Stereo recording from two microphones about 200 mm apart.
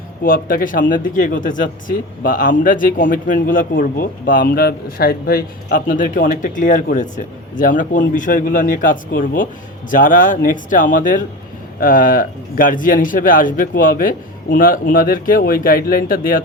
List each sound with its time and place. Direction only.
0.2 s a man's voice: 45° left (ahead or behind)